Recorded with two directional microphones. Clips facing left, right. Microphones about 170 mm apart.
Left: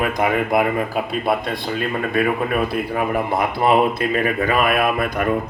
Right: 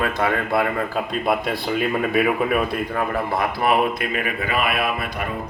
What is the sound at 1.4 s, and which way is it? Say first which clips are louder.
Speech: right 1 dB; 5° right (ahead or behind).